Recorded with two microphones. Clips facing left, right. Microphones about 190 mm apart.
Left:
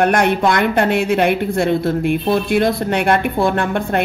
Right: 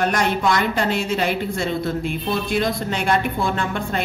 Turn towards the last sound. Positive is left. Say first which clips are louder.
# left 6 dB
turn(degrees=60)  # may be behind; listen again after turning